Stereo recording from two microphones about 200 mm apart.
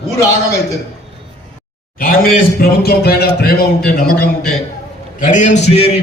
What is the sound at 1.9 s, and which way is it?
A man's voice, 45° left (ahead or behind).